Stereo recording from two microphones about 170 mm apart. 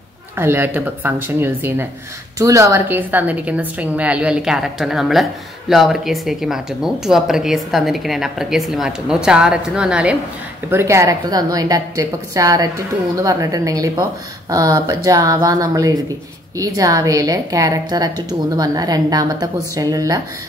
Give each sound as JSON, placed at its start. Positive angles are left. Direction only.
{"t": 0.4, "sound": "a woman's voice", "side_deg": -10}